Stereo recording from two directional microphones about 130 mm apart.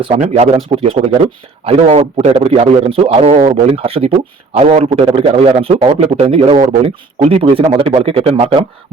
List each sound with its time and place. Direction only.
0.0 s a man's voice: 55° right (ahead or behind)